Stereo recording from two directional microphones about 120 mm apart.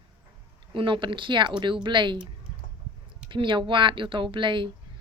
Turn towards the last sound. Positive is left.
turn(degrees=-45)  # may be behind; listen again after turning